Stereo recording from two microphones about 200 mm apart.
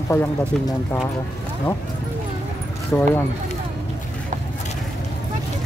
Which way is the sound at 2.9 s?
10° left (ahead or behind).